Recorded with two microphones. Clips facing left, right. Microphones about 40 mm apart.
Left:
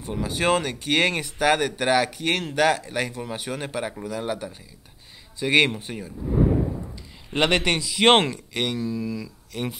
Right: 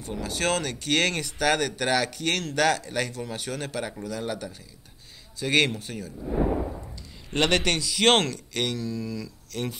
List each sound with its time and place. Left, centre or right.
0.0 s a man's voice: centre